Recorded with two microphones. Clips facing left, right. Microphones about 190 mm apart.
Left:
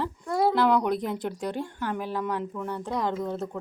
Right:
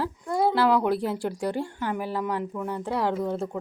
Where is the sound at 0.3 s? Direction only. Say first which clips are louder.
Even; 10° right (ahead or behind).